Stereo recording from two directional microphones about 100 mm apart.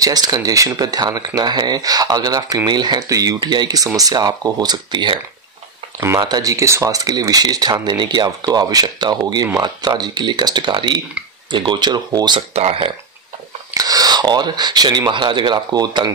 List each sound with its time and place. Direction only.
0.0 s speech: 40° right (ahead or behind)
5.9 s speech: 30° right (ahead or behind)
6.2 s speech: 40° right (ahead or behind)
12.4 s speech: 80° right
13.7 s speech: 40° right (ahead or behind)